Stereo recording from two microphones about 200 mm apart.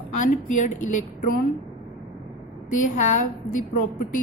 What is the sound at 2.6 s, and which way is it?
Speech, 40° left (ahead or behind).